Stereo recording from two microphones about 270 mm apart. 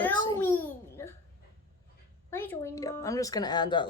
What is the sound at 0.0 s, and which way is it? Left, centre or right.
Babbling, centre.